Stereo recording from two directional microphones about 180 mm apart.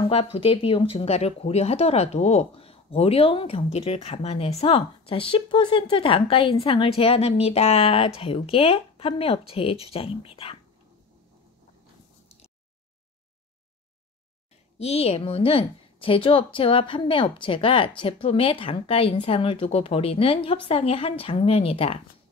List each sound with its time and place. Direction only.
0.1 s speech: 35° left (ahead or behind)
14.8 s speech: 35° left (ahead or behind)